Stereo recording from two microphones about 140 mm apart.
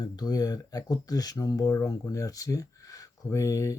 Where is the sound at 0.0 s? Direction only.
30° left (ahead or behind).